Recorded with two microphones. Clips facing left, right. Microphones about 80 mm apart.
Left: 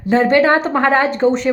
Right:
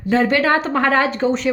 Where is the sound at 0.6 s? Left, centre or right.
Centre.